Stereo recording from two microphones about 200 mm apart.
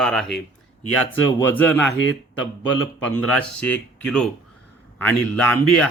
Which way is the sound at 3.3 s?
5° left (ahead or behind).